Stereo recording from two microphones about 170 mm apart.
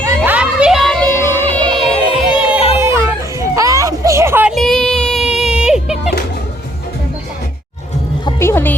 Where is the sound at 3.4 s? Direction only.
20° right (ahead or behind).